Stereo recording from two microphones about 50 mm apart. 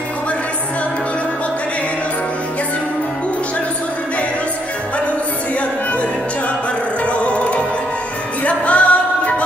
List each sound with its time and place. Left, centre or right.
7.1 s music: left